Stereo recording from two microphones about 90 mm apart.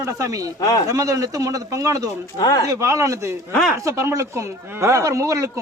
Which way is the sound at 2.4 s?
45° left (ahead or behind).